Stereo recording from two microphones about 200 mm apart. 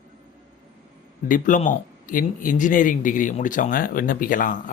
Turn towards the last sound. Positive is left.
turn(degrees=40)  # may be behind; listen again after turning